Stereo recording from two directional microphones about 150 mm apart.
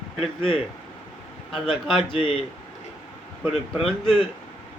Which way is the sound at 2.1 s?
40° left (ahead or behind).